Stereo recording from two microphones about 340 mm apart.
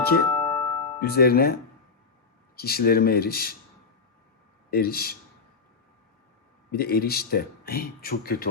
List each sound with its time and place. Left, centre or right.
0.3 s music: centre
1.0 s speech: left
2.6 s speech: left
4.7 s speech: left
6.7 s speech: left